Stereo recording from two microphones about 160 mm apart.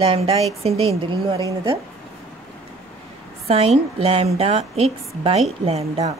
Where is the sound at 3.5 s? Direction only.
40° right (ahead or behind).